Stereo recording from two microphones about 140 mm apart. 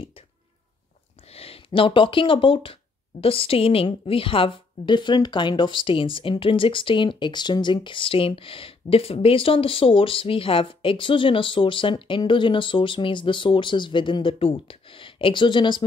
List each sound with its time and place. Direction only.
1.3 s speech: 45° left (ahead or behind)